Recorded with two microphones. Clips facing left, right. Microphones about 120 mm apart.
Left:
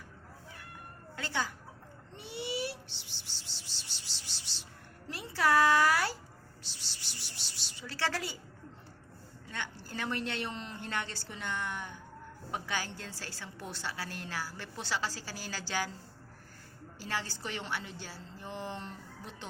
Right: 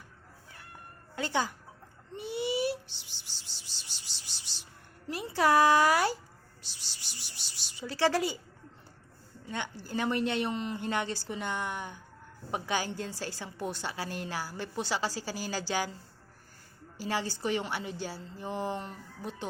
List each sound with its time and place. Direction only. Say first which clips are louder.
1.1 s speech: right 5 dB; 20° right (ahead or behind)
2.1 s music: right 6 dB; 15° right (ahead or behind)
5.0 s speech: right 3 dB; 15° right (ahead or behind)
6.6 s a sound: even; 15° right (ahead or behind)
9.5 s a woman's voice: right 5 dB; 15° right (ahead or behind)
17.0 s a woman's voice: right 6 dB; 15° right (ahead or behind)